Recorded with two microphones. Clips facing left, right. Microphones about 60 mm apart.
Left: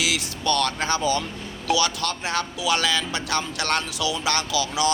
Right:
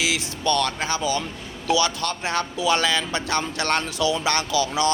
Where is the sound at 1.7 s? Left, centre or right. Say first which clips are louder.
Right 1 dB; right.